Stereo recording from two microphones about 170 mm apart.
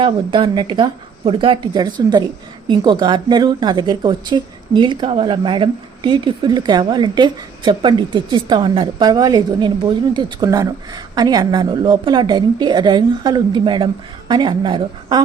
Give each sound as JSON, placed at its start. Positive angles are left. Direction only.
{"t": 0.0, "sound": "speech", "side_deg": -30}